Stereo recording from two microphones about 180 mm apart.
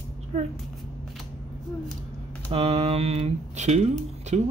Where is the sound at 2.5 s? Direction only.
35° right (ahead or behind).